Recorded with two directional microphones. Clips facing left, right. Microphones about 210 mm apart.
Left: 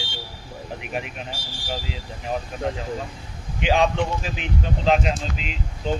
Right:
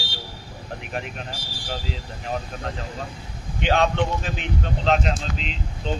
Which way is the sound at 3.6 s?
5° left (ahead or behind).